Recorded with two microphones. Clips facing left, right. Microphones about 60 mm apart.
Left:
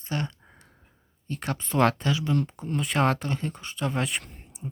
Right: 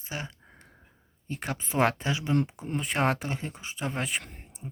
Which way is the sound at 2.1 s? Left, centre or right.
Right.